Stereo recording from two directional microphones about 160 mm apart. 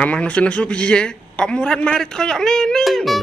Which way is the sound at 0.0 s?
10° left (ahead or behind).